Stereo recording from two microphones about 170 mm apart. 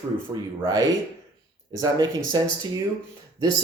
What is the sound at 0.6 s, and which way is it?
Speech, 20° right (ahead or behind).